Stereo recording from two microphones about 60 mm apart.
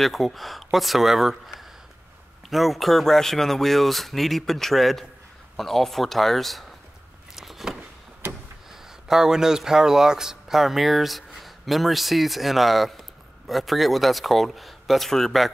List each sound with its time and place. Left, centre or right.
0.0 s speech: centre
7.3 s a sound: centre
9.0 s speech: centre